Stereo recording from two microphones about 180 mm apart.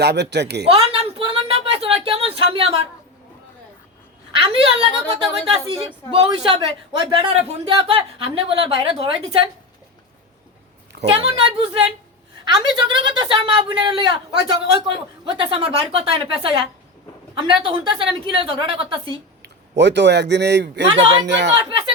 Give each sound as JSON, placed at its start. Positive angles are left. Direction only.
{"t": 0.0, "sound": "speech", "side_deg": -70}
{"t": 0.7, "sound": "a sound", "side_deg": -35}
{"t": 4.3, "sound": "a woman's voice", "side_deg": -30}
{"t": 11.0, "sound": "a woman's voice", "side_deg": -30}
{"t": 19.4, "sound": "a man's voice", "side_deg": -75}
{"t": 21.5, "sound": "speech", "side_deg": -20}